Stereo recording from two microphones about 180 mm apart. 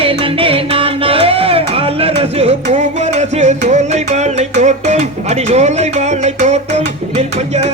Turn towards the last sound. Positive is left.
turn(degrees=-40)  # may be behind; listen again after turning